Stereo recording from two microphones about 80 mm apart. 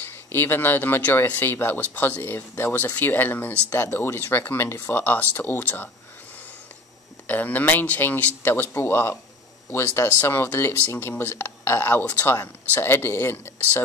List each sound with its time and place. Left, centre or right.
0.0 s speech: left
7.2 s speech: left